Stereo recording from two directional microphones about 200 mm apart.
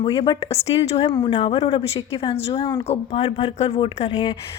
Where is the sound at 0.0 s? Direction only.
25° left (ahead or behind).